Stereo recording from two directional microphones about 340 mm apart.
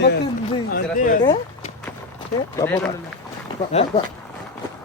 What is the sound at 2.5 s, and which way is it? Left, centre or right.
Speech, centre.